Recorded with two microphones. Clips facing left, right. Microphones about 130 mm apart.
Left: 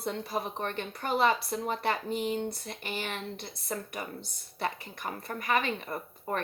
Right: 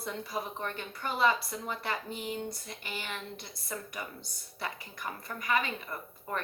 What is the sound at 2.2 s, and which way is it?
Speech, 30° left (ahead or behind).